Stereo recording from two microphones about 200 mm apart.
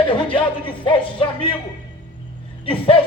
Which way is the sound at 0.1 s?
25° left (ahead or behind).